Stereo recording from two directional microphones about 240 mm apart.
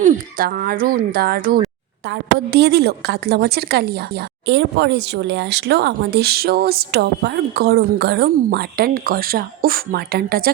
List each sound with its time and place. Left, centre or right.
0.0 s a woman's voice: right